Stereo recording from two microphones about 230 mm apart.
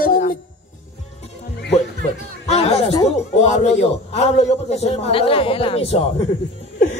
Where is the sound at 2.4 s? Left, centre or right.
Left.